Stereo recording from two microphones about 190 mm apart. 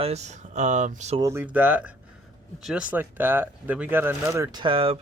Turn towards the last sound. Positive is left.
turn(degrees=-30)  # may be behind; listen again after turning